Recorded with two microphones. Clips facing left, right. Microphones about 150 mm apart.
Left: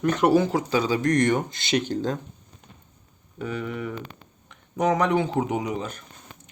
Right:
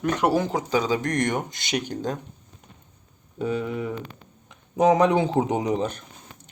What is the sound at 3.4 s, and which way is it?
Speech, 25° right (ahead or behind).